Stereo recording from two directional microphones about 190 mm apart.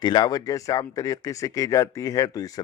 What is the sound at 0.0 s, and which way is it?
Speech, 20° left (ahead or behind).